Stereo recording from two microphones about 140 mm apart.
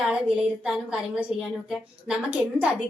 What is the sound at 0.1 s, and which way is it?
A woman's voice, 5° right (ahead or behind).